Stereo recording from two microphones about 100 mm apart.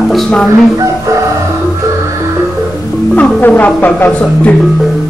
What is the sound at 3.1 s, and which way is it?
Speech, 15° left (ahead or behind).